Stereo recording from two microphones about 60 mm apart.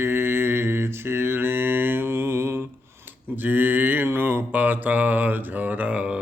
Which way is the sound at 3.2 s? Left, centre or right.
Right.